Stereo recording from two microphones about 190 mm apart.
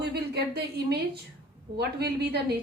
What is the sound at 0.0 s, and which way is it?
A woman's voice, 60° right (ahead or behind).